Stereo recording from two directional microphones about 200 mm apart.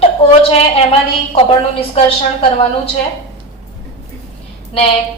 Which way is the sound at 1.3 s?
30° left (ahead or behind).